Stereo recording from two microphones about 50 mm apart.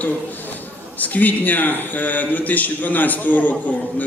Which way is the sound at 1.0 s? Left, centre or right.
Left.